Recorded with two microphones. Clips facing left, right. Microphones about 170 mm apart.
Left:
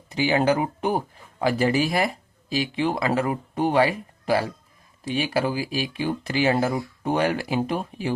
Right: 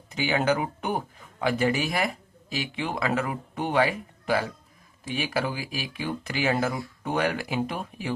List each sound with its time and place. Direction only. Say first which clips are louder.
0.1 s speech: left 4 dB; 35° left (ahead or behind)